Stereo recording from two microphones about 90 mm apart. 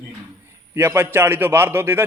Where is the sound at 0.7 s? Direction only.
25° right (ahead or behind).